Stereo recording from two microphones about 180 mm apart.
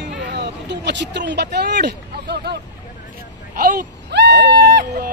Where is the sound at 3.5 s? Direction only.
50° right (ahead or behind); by 5.1 s 65° right (ahead or behind).